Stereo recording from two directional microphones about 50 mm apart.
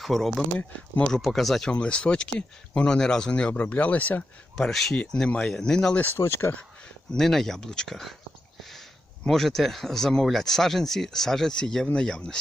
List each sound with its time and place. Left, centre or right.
0.0 s speech: centre
1.7 s speech: left
3.6 s speech: left
4.5 s speech: centre
4.9 s speech: left
6.0 s speech: left
7.2 s speech: centre
9.2 s speech: centre